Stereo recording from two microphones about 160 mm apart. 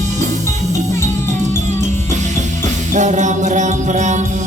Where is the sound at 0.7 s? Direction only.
20° left (ahead or behind).